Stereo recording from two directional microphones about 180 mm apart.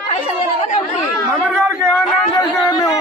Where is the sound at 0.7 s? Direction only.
40° left (ahead or behind).